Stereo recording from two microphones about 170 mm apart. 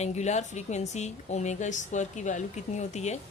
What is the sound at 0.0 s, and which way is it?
Speech, 40° left (ahead or behind).